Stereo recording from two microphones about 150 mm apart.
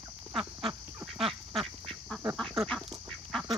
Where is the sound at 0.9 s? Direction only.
Centre (ahead or behind).